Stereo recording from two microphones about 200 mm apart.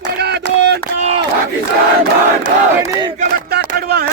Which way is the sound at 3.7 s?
55° right (ahead or behind).